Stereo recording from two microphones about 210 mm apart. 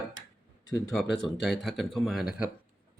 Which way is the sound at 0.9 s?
Centre (ahead or behind).